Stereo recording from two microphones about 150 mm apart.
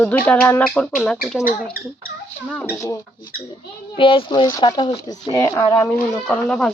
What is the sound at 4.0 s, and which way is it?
Speech, 35° left (ahead or behind).